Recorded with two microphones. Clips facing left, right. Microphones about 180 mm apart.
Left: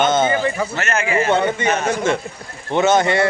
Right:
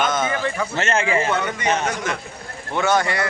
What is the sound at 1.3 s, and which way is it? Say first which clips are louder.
Speech: left 4 dB; 30° left (ahead or behind).